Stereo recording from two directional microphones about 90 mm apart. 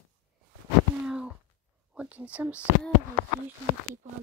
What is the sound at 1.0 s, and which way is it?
A child's voice, 10° right (ahead or behind).